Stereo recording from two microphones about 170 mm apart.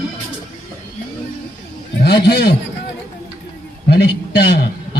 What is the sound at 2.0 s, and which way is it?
Speech, 75° left (ahead or behind).